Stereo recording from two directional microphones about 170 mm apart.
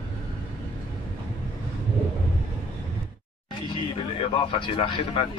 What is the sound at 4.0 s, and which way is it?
Speech, 30° left (ahead or behind).